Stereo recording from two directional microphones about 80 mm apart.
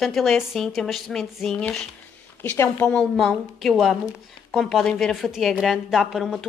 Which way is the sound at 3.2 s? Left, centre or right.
Centre.